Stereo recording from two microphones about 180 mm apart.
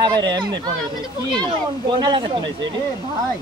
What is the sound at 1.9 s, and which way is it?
Speech, 25° right (ahead or behind).